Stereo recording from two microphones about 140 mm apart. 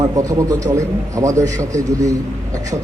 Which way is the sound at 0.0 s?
25° right (ahead or behind).